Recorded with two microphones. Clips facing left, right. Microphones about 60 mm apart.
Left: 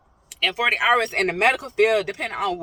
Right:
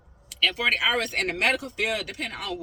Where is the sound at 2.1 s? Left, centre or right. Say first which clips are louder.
Left 7 dB; left.